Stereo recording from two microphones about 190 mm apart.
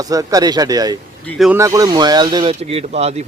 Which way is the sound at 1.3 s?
Centre (ahead or behind).